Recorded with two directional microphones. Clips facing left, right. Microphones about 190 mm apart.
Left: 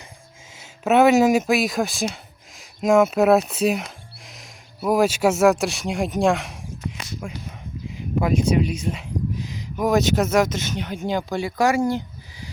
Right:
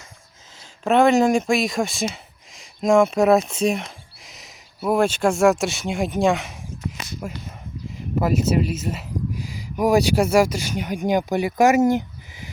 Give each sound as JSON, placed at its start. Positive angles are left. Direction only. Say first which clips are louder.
{"t": 0.5, "sound": "speech", "louder": "left 1 dB", "side_deg": 5}
{"t": 7.9, "sound": "speech", "louder": "even", "side_deg": 0}